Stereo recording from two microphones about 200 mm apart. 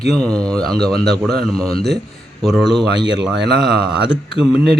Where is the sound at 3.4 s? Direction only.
60° right (ahead or behind).